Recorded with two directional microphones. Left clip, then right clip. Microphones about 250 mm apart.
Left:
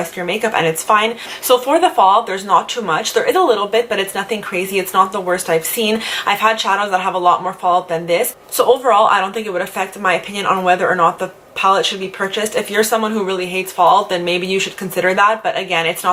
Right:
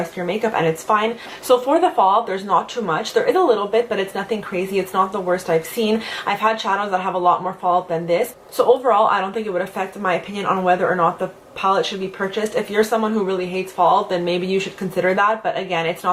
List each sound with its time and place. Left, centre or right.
0.0 s speech: centre
7.6 s speech: right
7.9 s speech: centre